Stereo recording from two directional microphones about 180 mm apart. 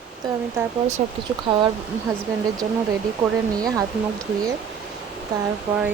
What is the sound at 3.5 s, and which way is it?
Speech, 20° right (ahead or behind).